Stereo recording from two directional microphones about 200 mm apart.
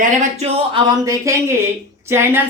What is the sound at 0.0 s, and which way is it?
A woman's voice, 40° right (ahead or behind).